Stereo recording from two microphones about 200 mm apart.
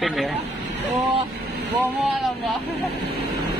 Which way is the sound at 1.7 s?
Centre (ahead or behind).